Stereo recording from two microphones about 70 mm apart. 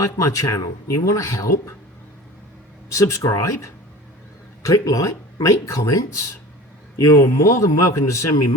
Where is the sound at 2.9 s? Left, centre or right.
Left.